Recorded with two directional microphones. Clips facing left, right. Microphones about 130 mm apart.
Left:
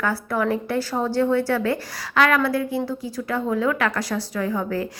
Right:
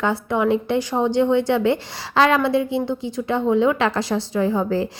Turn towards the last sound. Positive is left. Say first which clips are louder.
# right 4 dB
turn(degrees=-25)  # may be behind; listen again after turning